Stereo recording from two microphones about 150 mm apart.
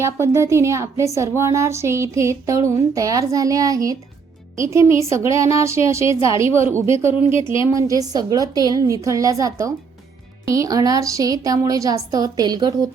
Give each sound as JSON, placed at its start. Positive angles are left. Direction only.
{"t": 0.0, "sound": "speech", "side_deg": -20}
{"t": 6.1, "sound": "a woman's voice", "side_deg": 35}
{"t": 6.3, "sound": "a woman's voice", "side_deg": -20}